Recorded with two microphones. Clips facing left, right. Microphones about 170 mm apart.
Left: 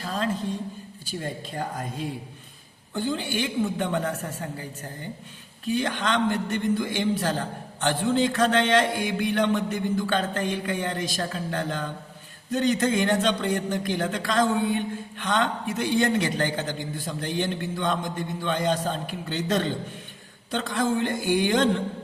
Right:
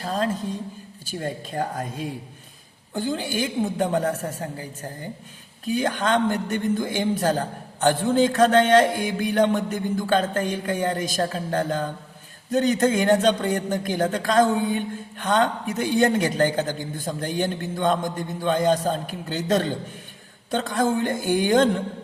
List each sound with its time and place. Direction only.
0.0 s a woman's voice: 40° right (ahead or behind)
2.9 s a woman's voice: 40° right (ahead or behind)